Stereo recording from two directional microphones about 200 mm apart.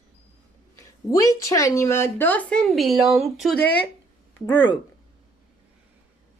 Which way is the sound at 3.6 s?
55° left (ahead or behind).